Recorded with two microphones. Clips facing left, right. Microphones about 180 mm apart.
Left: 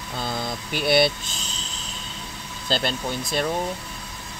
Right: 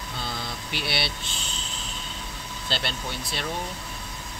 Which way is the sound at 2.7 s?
45° left (ahead or behind).